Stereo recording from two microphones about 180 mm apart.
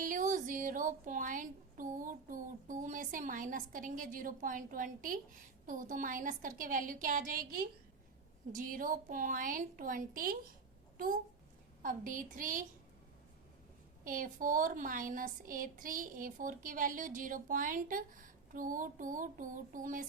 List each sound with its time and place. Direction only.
0.0 s a child's voice: 45° right (ahead or behind)
14.0 s speech: 50° right (ahead or behind)